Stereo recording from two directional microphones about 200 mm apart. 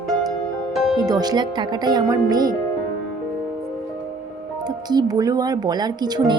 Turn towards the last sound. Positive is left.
turn(degrees=-20)  # may be behind; listen again after turning